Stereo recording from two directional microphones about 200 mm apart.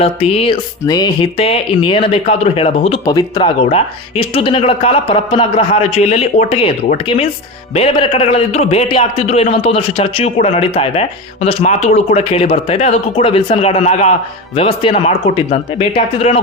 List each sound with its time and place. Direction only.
0.0 s speech: 30° left (ahead or behind)
3.1 s speech: 20° left (ahead or behind)
3.7 s speech: 30° left (ahead or behind)